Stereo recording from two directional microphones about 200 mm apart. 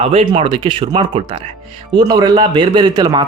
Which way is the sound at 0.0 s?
30° right (ahead or behind).